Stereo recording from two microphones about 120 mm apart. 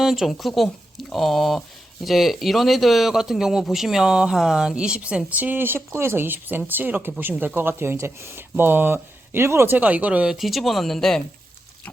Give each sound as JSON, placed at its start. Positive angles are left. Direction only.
{"t": 0.0, "sound": "speech", "side_deg": 0}